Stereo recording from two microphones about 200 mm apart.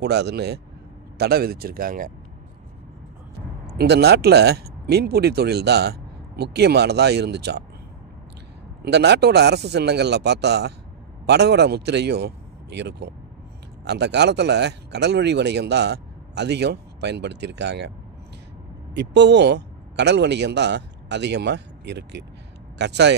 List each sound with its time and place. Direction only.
0.0 s speech: 55° right (ahead or behind)
3.6 s speech: 55° right (ahead or behind)
8.8 s speech: 55° right (ahead or behind)
18.9 s a man's voice: 60° right (ahead or behind)